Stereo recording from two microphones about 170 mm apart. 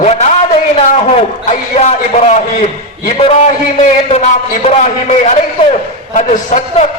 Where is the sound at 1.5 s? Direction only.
45° left (ahead or behind).